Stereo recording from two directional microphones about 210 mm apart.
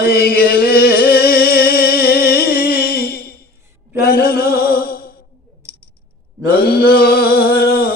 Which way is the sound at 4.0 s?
50° left (ahead or behind).